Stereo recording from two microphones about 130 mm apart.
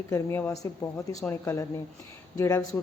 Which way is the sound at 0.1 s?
20° left (ahead or behind).